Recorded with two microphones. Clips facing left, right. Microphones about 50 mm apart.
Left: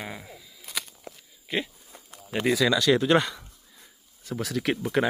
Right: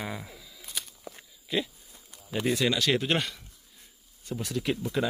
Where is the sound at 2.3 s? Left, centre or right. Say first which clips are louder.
Left 2 dB; left.